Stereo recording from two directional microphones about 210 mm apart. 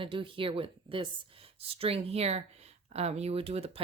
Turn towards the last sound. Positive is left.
turn(degrees=-30)  # may be behind; listen again after turning